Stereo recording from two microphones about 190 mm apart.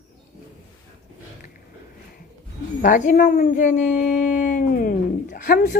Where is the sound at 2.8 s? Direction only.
45° left (ahead or behind).